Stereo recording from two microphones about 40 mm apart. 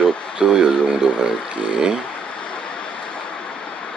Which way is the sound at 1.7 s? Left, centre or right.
Centre.